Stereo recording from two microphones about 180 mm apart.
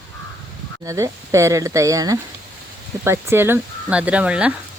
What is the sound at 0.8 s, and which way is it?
Speech, 15° right (ahead or behind).